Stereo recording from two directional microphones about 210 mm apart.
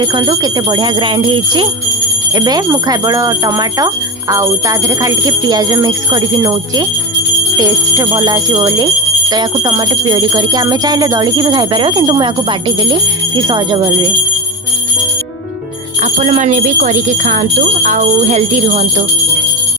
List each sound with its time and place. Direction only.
0.0 s speech: 20° right (ahead or behind)
16.1 s speech: 35° right (ahead or behind)